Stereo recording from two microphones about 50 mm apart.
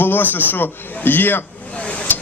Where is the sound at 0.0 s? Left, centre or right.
Left.